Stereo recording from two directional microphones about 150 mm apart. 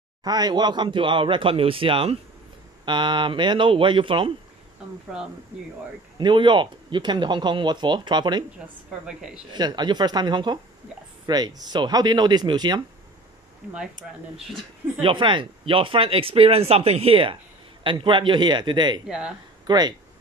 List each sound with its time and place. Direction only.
0.2 s speech: 30° right (ahead or behind)
6.1 s speech: 30° right (ahead or behind)
9.0 s speech: 5° right (ahead or behind)
9.5 s speech: 30° right (ahead or behind)
15.0 s speech: 35° right (ahead or behind)
19.0 s speech: 5° right (ahead or behind)
19.6 s speech: 25° right (ahead or behind)